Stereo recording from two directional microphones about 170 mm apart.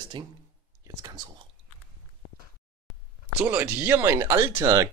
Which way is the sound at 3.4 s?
10° right (ahead or behind).